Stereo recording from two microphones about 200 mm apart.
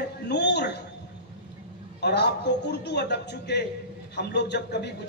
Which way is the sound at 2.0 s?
55° left (ahead or behind).